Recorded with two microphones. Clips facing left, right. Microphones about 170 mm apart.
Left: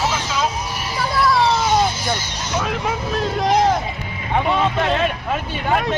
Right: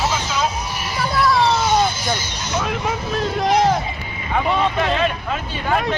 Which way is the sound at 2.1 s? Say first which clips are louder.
Even; centre (ahead or behind).